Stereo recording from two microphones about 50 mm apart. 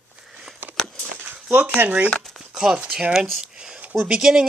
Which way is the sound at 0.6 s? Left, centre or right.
Right.